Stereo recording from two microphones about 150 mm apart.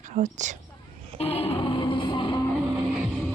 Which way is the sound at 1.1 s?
40° left (ahead or behind).